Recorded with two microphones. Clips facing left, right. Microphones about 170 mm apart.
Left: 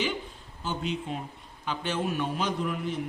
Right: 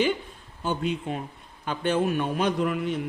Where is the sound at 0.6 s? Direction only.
55° right (ahead or behind).